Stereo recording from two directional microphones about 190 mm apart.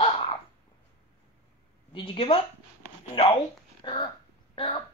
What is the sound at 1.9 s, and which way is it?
Speech, 30° left (ahead or behind).